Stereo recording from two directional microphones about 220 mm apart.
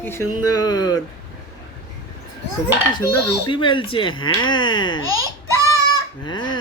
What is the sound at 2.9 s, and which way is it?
Speech, 20° left (ahead or behind).